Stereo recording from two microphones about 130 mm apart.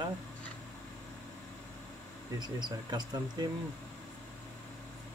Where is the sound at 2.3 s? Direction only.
35° right (ahead or behind).